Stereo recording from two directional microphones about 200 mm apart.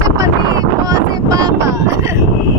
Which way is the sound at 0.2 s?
20° right (ahead or behind).